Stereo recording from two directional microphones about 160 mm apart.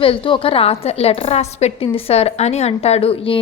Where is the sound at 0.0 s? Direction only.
35° left (ahead or behind).